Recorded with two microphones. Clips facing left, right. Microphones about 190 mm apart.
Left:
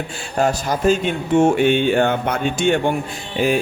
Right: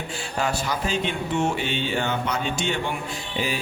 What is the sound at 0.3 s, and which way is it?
Speech, 45° left (ahead or behind).